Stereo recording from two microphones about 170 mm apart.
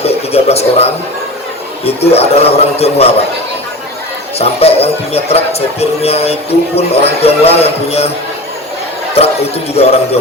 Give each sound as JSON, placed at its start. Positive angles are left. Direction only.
{"t": 0.0, "sound": "a sound", "side_deg": 35}
{"t": 1.8, "sound": "speech", "side_deg": 35}
{"t": 4.4, "sound": "speech", "side_deg": 35}
{"t": 9.1, "sound": "speech", "side_deg": 35}